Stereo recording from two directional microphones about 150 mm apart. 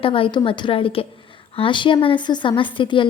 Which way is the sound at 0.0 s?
35° left (ahead or behind).